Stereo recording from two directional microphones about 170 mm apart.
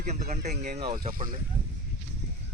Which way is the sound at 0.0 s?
45° right (ahead or behind).